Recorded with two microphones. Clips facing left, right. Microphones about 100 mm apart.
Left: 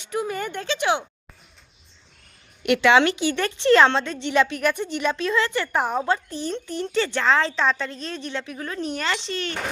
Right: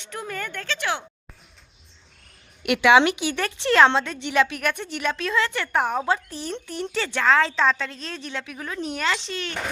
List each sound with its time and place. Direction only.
0.0 s a woman's voice: 10° left (ahead or behind)
2.6 s a woman's voice: 5° right (ahead or behind)